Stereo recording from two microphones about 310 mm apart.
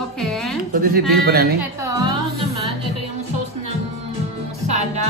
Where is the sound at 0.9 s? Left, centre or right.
Right.